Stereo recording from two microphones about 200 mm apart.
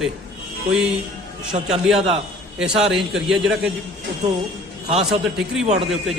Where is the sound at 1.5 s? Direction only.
35° right (ahead or behind).